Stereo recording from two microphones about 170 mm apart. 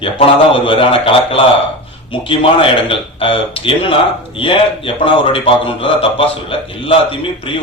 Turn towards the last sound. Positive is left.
turn(degrees=30)  # may be behind; listen again after turning